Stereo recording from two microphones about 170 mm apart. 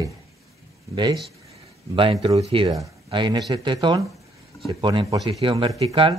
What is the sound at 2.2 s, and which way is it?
Speech, 35° right (ahead or behind).